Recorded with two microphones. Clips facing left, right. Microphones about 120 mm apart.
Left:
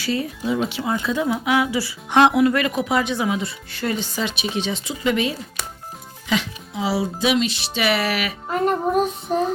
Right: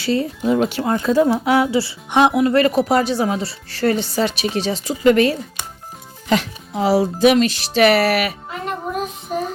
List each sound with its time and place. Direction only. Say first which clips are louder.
0.0 s speech: right 4 dB; 30° right (ahead or behind)
0.7 s speech: right 5 dB; 45° right (ahead or behind)
2.0 s speech: even; 15° right (ahead or behind)
2.4 s speech: right 4 dB; 30° right (ahead or behind); by 8.3 s 55° right (ahead or behind)
8.4 s child singing: left 6 dB; 40° left (ahead or behind)